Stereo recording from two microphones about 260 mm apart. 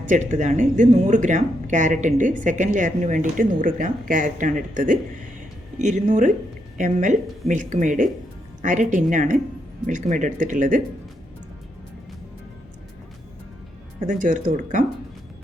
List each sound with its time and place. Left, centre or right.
0.1 s a woman's voice: right
14.1 s a woman's voice: right